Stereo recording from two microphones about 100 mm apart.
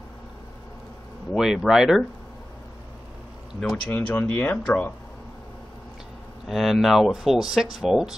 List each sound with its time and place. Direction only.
1.3 s speech: 5° right (ahead or behind)
3.7 s speech: 10° left (ahead or behind)
6.4 s speech: centre (ahead or behind)